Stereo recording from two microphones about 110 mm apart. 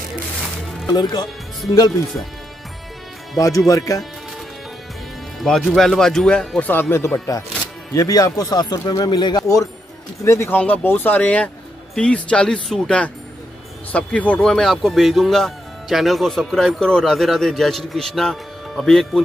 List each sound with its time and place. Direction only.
3.3 s speech: 30° left (ahead or behind)
5.4 s speech: 5° left (ahead or behind)
6.7 s speech: 20° left (ahead or behind); by 19.2 s centre (ahead or behind)